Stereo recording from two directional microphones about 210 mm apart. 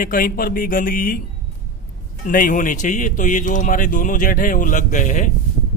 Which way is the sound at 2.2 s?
40° left (ahead or behind).